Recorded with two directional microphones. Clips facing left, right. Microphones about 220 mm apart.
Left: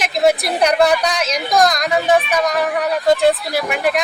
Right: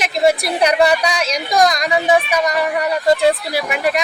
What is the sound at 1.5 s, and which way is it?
A man's voice, 10° right (ahead or behind).